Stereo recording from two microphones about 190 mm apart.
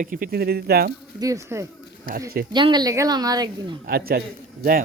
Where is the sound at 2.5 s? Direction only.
25° right (ahead or behind).